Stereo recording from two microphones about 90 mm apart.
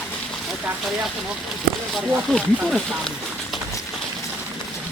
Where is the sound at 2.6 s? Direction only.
Centre (ahead or behind).